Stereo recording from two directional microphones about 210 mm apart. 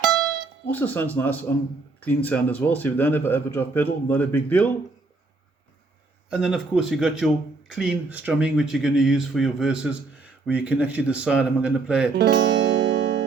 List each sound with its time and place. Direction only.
0.7 s a man's voice: 10° left (ahead or behind)
6.3 s speech: 5° right (ahead or behind)
12.1 s music: 60° right (ahead or behind)